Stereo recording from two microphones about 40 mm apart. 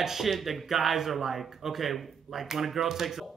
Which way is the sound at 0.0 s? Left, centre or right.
Centre.